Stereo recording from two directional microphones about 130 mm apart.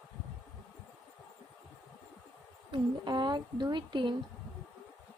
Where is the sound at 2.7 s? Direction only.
35° right (ahead or behind).